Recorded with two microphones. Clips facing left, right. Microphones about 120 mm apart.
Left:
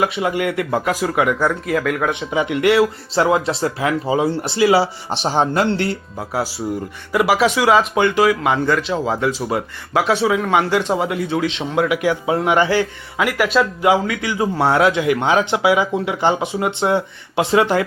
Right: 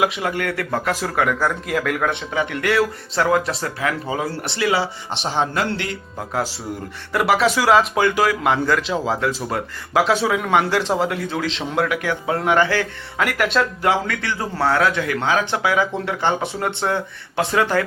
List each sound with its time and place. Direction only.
0.0 s speech: 5° left (ahead or behind)
2.3 s speech: 15° left (ahead or behind); by 6.0 s 35° left (ahead or behind)
7.1 s speech: 5° left (ahead or behind)
13.1 s speech: 5° left (ahead or behind); by 17.8 s 20° left (ahead or behind)